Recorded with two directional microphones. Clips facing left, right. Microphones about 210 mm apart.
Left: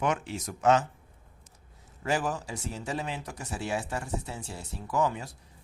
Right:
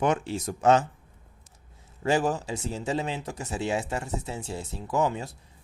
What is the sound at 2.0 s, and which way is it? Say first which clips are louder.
Speech: right 5 dB; 25° right (ahead or behind).